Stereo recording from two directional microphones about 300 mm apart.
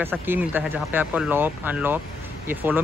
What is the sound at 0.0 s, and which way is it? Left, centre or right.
Speech, centre.